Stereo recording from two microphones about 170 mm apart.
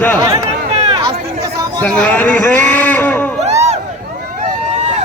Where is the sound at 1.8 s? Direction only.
10° left (ahead or behind).